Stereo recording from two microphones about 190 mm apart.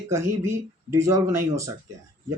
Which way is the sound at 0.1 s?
15° right (ahead or behind).